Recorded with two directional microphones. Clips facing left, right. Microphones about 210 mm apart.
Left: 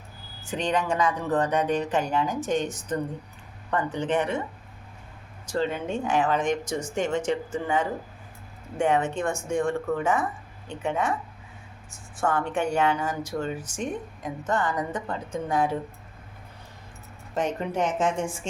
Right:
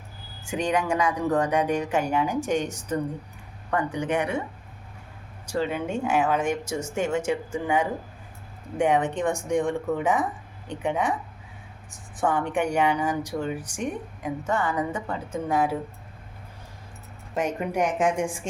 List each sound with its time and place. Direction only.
0.4 s a woman's voice: 10° right (ahead or behind)
5.5 s a woman's voice: 10° right (ahead or behind)
17.3 s a woman's voice: 10° right (ahead or behind)